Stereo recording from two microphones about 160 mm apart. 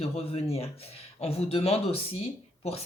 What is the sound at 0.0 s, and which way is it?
Speech, 35° left (ahead or behind).